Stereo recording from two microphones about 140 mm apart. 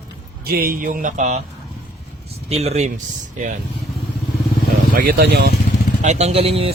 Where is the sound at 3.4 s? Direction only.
60° right (ahead or behind).